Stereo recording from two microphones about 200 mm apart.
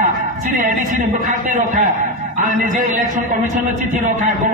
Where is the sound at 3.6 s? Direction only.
40° right (ahead or behind).